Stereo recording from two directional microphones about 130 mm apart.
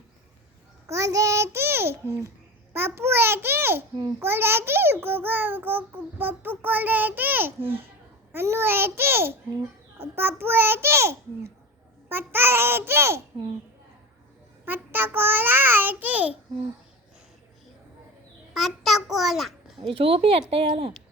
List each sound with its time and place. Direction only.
0.9 s a child's voice: 25° right (ahead or behind)
14.6 s a child's voice: 15° right (ahead or behind)
18.5 s a child's voice: centre (ahead or behind)
19.9 s speech: 45° right (ahead or behind)